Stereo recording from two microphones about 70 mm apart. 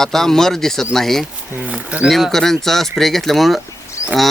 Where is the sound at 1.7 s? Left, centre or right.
Centre.